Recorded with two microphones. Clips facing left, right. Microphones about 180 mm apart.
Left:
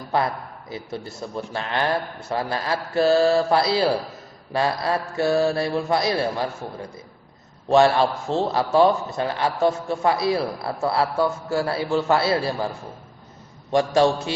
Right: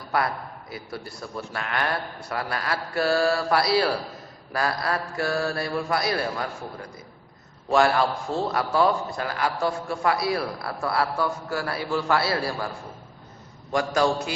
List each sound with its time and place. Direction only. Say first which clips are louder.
0.7 s a man's voice: left 5 dB; 25° left (ahead or behind)
7.7 s a man's voice: left 4 dB; 25° left (ahead or behind)